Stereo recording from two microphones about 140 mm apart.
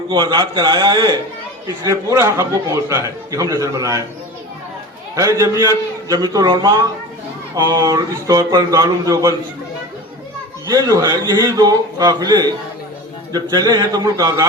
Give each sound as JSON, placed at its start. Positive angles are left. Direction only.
{"t": 0.1, "sound": "a man's voice", "side_deg": -30}
{"t": 5.1, "sound": "a man's voice", "side_deg": -25}
{"t": 10.7, "sound": "a man's voice", "side_deg": -25}